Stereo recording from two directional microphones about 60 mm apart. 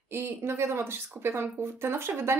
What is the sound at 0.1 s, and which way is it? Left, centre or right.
Speech, right.